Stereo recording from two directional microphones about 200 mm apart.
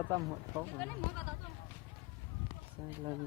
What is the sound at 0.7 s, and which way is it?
Speech, 5° left (ahead or behind).